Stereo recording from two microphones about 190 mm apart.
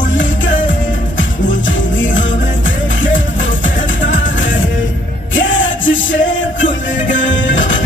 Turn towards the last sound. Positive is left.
turn(degrees=80)